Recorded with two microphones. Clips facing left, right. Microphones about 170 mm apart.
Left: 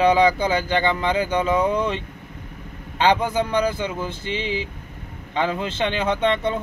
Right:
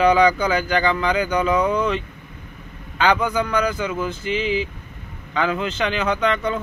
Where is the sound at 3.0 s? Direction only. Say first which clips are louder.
Even; 30° left (ahead or behind).